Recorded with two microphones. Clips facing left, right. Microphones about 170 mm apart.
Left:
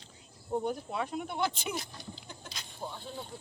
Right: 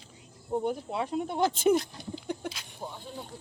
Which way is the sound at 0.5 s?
25° right (ahead or behind).